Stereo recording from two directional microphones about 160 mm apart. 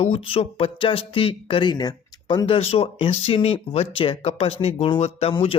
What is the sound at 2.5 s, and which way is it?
Speech, 35° left (ahead or behind).